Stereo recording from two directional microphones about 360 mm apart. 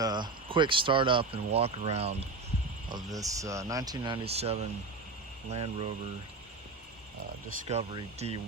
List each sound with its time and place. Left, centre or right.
0.0 s speech: centre
7.7 s speech: centre